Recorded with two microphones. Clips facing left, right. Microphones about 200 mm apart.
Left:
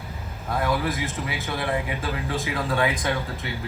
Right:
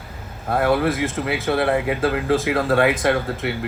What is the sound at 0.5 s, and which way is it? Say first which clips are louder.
A man's voice: right 6 dB; 65° right (ahead or behind).